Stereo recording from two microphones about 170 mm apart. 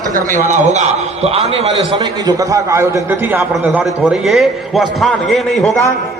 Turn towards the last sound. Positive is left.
turn(degrees=0)  # may be behind; listen again after turning